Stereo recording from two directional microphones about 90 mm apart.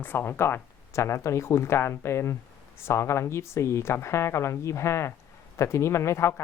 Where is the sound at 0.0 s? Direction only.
25° left (ahead or behind).